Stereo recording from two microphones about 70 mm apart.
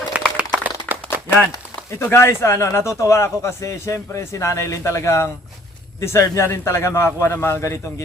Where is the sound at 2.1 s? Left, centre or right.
Left.